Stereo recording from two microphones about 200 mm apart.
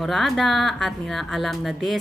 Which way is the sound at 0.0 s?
Centre (ahead or behind).